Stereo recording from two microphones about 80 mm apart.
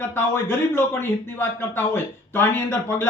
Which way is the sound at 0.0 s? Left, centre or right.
Left.